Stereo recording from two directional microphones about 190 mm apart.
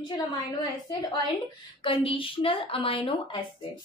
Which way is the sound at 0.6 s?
20° left (ahead or behind).